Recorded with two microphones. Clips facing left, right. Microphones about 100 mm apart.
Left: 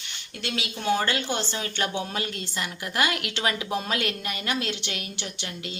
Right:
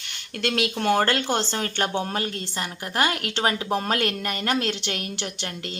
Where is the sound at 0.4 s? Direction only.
60° right (ahead or behind).